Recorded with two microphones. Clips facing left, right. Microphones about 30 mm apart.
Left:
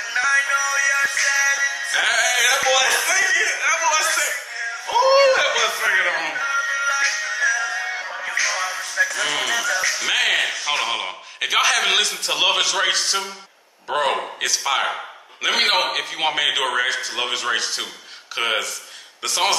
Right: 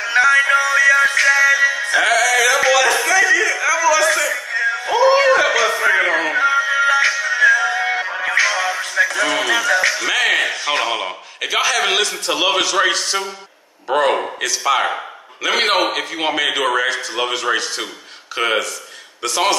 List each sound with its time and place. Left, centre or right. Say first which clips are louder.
0.0 s music: right 6 dB; right
2.0 s music: right 4 dB; centre
2.7 s a sound: right 4 dB; centre
3.6 s a sound: right 4 dB; centre
4.5 s music: right 9 dB; right
5.7 s a sound: right 4 dB; right
6.2 s music: right 6 dB; right
8.5 s music: right 5 dB; right
9.2 s speech: right 4 dB; right
9.5 s music: right 5 dB; right
10.0 s a man's voice: right 3 dB; centre